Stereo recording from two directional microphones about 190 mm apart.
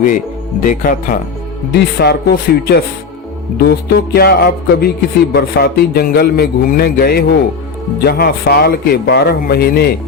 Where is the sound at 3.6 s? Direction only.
55° left (ahead or behind).